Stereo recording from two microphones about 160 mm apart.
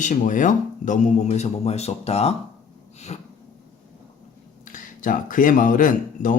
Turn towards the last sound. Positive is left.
turn(degrees=55)  # may be behind; listen again after turning